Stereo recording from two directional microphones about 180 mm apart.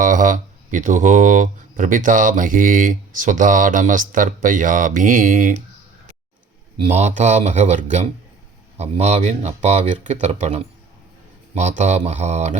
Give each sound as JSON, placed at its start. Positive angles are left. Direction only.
{"t": 0.0, "sound": "speech", "side_deg": -45}
{"t": 6.7, "sound": "speech", "side_deg": -40}